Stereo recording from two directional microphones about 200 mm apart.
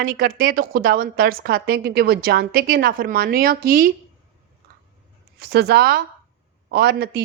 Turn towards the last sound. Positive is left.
turn(degrees=-55)  # may be behind; listen again after turning